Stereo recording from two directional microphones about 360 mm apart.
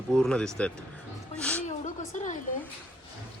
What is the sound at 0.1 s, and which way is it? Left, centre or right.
A woman's voice, centre.